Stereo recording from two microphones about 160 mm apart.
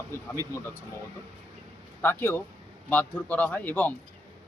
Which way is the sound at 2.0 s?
15° left (ahead or behind).